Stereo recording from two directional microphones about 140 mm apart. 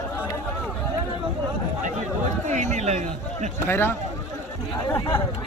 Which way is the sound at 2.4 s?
60° right (ahead or behind).